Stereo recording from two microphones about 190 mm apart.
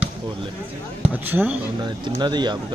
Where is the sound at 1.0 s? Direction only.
10° right (ahead or behind).